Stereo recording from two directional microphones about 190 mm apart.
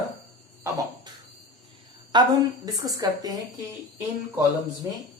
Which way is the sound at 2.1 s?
25° right (ahead or behind).